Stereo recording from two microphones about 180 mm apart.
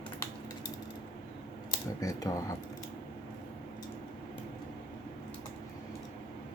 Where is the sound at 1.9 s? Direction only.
20° left (ahead or behind).